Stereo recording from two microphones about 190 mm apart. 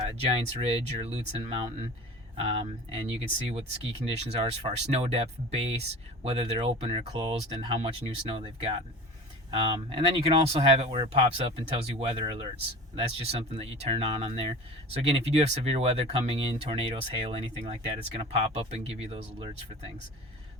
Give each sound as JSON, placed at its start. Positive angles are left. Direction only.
{"t": 0.0, "sound": "speech", "side_deg": -30}